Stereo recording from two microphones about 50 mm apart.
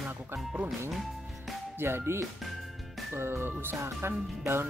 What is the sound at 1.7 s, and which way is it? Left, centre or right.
Speech, right.